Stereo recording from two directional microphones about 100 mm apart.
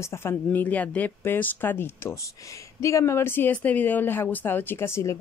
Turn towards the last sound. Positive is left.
turn(degrees=30)  # may be behind; listen again after turning